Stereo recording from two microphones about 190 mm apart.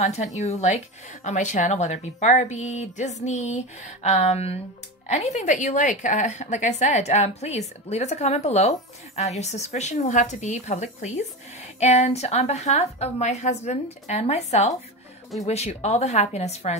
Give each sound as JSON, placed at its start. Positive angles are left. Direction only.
{"t": 0.0, "sound": "a woman's voice", "side_deg": 35}